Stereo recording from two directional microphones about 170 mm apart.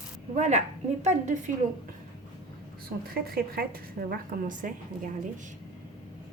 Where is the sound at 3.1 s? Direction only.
65° right (ahead or behind).